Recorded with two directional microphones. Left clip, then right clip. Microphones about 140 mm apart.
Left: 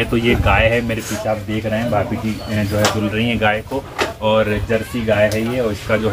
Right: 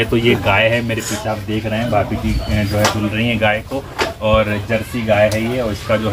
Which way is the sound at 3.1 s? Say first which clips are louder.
Right 1 dB; centre (ahead or behind).